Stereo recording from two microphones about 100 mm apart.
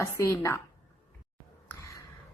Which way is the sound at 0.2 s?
30° left (ahead or behind).